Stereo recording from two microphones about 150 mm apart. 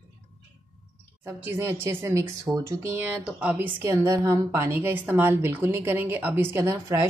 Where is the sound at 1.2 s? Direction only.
15° right (ahead or behind).